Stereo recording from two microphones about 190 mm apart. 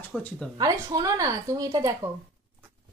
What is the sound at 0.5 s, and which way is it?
A woman's voice, 20° right (ahead or behind).